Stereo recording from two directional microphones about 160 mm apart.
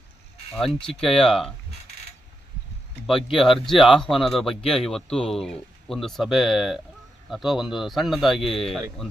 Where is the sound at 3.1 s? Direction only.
35° left (ahead or behind).